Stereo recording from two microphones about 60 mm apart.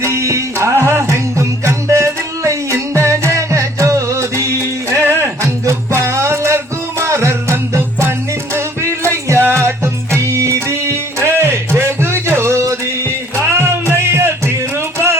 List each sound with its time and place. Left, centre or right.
0.0 s music: right
4.9 s music: right
11.2 s music: right